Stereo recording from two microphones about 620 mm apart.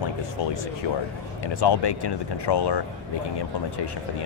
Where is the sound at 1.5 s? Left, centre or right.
Left.